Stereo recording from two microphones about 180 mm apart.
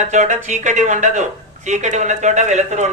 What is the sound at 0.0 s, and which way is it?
A man's voice, 40° right (ahead or behind).